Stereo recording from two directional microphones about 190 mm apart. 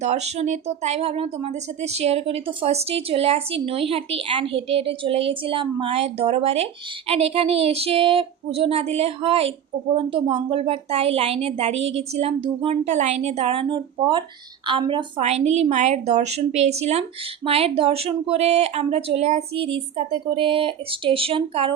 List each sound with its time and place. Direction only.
0.0 s speech: 35° right (ahead or behind)